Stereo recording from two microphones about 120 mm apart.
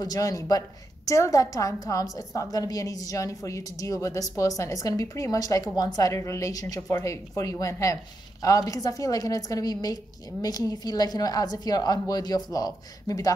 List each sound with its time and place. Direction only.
0.0 s a woman's voice: 30° left (ahead or behind)